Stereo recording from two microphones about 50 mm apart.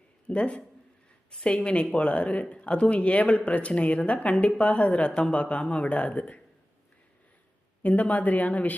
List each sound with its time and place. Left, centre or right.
0.3 s speech: left
7.8 s speech: left